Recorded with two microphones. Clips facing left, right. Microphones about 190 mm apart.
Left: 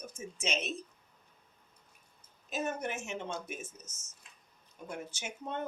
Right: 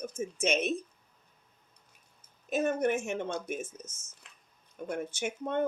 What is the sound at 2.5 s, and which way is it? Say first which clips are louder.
Speech: right 8 dB; 55° right (ahead or behind).